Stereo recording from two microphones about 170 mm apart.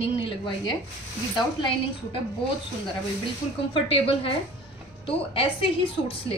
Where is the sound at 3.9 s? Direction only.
35° left (ahead or behind).